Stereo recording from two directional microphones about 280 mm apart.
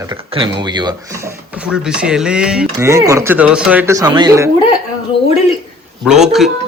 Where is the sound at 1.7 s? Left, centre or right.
Centre.